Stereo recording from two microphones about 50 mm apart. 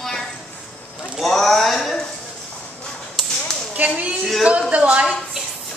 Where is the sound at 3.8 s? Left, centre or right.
Right.